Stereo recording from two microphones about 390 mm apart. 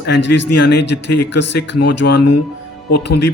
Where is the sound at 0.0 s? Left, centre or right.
Left.